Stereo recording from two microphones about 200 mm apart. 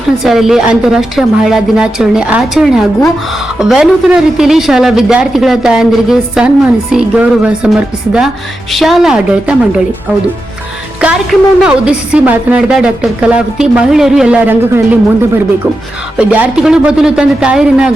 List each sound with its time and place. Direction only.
0.3 s a woman's voice: centre (ahead or behind)
11.0 s a woman's voice: 5° right (ahead or behind)
16.1 s a woman's voice: 5° right (ahead or behind)